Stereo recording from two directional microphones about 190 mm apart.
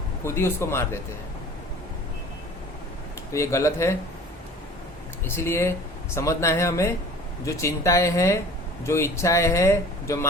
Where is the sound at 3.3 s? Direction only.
15° left (ahead or behind).